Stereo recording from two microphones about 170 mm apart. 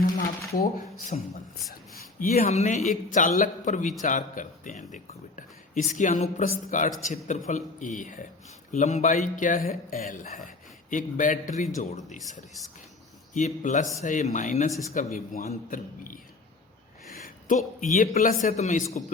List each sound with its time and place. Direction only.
1.1 s speech: 45° left (ahead or behind)
2.4 s speech: 45° left (ahead or behind)
13.3 s speech: 45° left (ahead or behind)
17.1 s a sound: 55° left (ahead or behind)
17.7 s speech: 50° left (ahead or behind)
18.5 s speech: 45° left (ahead or behind)